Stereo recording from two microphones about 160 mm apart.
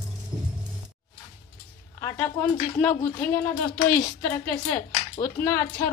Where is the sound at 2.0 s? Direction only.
15° left (ahead or behind).